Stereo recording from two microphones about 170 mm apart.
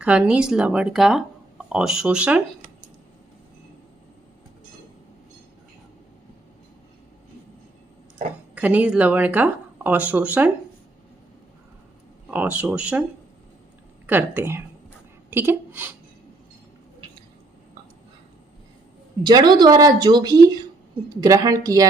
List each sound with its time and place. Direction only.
0.0 s speech: 5° right (ahead or behind)
8.5 s speech: 10° right (ahead or behind)
12.3 s speech: 10° right (ahead or behind)
14.1 s speech: 10° right (ahead or behind)
19.2 s a woman's voice: 25° right (ahead or behind)